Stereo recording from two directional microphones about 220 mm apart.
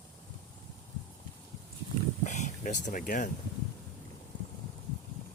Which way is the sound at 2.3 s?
35° left (ahead or behind).